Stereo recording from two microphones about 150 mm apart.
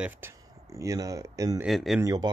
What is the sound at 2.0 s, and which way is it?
Speech, 25° right (ahead or behind).